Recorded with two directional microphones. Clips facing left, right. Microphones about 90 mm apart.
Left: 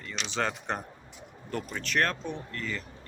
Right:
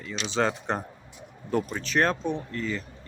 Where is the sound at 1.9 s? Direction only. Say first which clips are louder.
Right 5 dB; 20° right (ahead or behind).